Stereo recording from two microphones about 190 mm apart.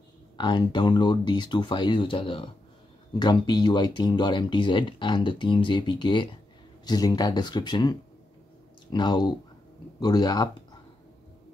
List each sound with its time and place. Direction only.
0.4 s speech: 25° left (ahead or behind)